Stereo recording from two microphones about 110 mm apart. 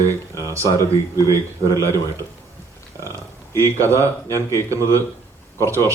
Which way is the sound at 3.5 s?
20° left (ahead or behind).